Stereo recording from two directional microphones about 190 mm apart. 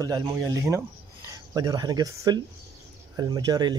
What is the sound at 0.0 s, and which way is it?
Speech, 15° right (ahead or behind).